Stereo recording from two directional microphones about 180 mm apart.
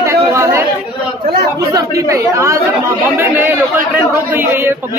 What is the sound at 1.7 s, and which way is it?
A man's voice, 15° right (ahead or behind).